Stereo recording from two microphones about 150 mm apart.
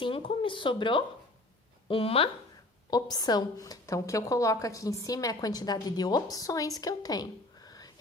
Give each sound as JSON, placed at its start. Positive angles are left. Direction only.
{"t": 0.0, "sound": "speech", "side_deg": 35}
{"t": 2.9, "sound": "a woman's voice", "side_deg": 25}